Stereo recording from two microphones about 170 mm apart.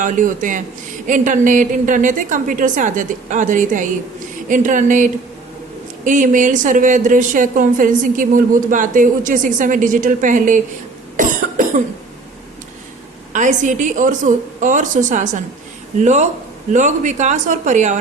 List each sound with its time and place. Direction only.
0.0 s a woman's voice: 50° right (ahead or behind)
11.2 s cough: 50° right (ahead or behind)
13.3 s a woman's voice: 45° right (ahead or behind)